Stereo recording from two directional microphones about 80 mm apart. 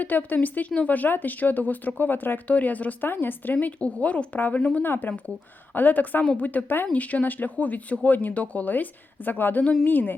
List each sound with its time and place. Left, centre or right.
0.0 s speech: left